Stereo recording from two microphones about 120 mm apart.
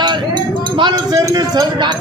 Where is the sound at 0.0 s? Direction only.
40° right (ahead or behind).